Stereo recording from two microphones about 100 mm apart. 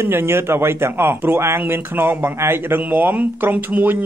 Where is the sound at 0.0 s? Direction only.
25° right (ahead or behind).